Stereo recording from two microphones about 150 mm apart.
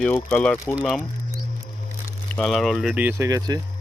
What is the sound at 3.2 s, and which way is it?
Speech, 25° right (ahead or behind).